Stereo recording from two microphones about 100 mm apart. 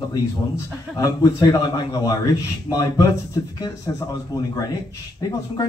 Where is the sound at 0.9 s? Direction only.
35° left (ahead or behind).